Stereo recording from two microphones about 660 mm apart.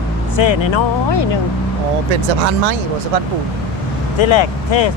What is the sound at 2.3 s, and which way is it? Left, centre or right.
Speech, right.